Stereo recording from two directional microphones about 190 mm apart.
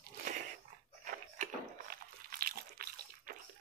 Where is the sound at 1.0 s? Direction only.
50° right (ahead or behind).